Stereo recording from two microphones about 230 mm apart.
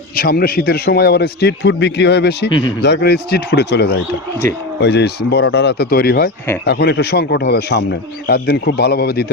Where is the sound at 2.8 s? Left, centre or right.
Left.